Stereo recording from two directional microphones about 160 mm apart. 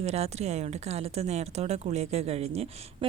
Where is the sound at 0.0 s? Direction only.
40° right (ahead or behind).